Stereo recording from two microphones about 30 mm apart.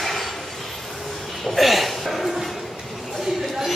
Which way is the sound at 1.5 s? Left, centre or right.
Centre.